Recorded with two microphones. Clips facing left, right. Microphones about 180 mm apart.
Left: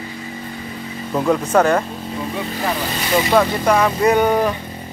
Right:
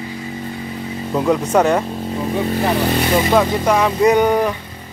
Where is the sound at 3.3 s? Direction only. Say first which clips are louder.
Left 2 dB; 10° right (ahead or behind).